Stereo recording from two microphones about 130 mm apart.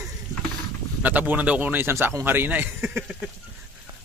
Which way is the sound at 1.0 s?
10° right (ahead or behind).